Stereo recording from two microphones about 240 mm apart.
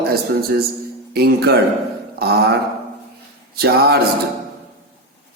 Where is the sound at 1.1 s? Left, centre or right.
Right.